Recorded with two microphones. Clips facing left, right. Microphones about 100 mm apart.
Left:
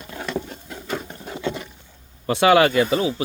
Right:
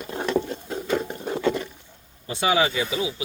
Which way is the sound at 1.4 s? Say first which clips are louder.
Right 3 dB; 10° left (ahead or behind).